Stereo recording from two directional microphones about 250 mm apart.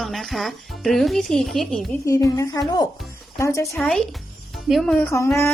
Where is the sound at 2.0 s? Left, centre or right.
Centre.